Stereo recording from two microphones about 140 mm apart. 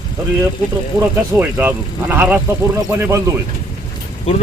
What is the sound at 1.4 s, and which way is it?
A man's voice, 10° right (ahead or behind).